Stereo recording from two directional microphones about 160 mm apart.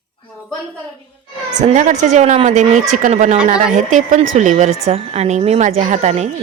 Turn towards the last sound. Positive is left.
turn(degrees=-45)  # may be behind; listen again after turning